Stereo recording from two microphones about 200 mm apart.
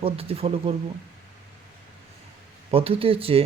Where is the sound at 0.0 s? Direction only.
30° right (ahead or behind).